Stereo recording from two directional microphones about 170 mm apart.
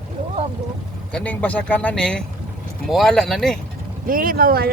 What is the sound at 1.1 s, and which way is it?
Speech, 5° left (ahead or behind).